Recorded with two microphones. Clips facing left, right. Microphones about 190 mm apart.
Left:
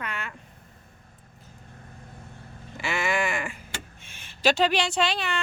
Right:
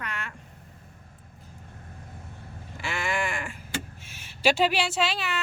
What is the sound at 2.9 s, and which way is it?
Sheep, 75° left (ahead or behind).